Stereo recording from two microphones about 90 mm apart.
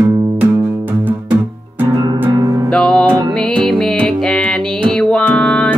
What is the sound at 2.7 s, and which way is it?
Music, 5° left (ahead or behind).